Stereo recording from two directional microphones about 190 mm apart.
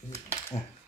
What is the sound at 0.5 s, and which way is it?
Speech, 30° left (ahead or behind).